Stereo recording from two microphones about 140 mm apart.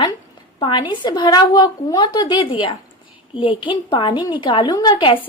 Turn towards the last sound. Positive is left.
turn(degrees=35)  # may be behind; listen again after turning